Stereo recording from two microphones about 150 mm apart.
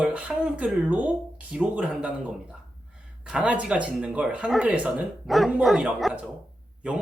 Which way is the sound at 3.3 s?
5° right (ahead or behind).